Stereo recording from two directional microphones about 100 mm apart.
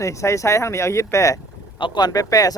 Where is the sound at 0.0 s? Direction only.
30° left (ahead or behind).